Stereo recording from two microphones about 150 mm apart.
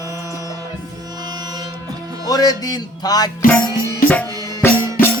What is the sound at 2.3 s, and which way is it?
Music, 25° left (ahead or behind).